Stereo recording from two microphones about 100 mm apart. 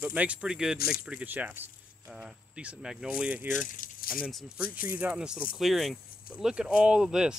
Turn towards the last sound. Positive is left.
turn(degrees=-10)  # may be behind; listen again after turning